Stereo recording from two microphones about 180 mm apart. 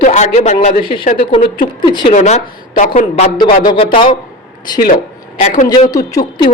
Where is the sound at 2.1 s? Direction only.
40° left (ahead or behind).